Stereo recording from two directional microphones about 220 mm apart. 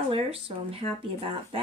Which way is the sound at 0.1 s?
25° right (ahead or behind).